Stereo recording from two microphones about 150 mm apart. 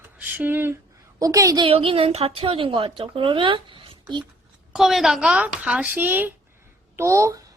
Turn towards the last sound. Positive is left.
turn(degrees=-20)  # may be behind; listen again after turning